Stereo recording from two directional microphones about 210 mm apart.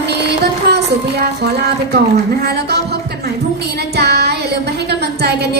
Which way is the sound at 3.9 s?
50° right (ahead or behind).